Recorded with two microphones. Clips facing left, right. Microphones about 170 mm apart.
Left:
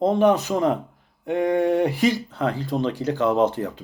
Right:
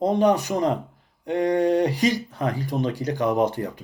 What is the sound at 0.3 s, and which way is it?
Speech, 15° right (ahead or behind).